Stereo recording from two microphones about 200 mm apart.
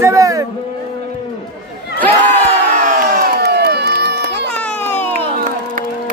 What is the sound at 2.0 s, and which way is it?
Crowd, 10° left (ahead or behind).